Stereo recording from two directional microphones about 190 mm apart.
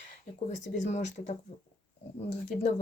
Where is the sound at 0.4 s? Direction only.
35° left (ahead or behind).